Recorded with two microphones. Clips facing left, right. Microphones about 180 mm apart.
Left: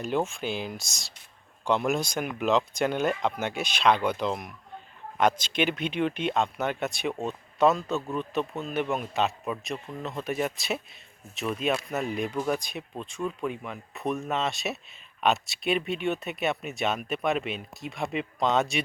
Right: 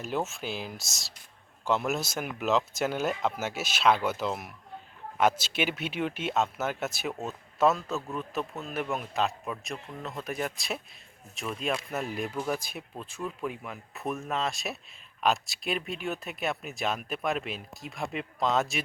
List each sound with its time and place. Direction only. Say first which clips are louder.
0.0 s speech: left 4 dB; 5° right (ahead or behind)